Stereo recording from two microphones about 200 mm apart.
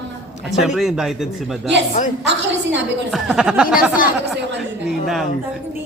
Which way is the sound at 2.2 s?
65° right (ahead or behind).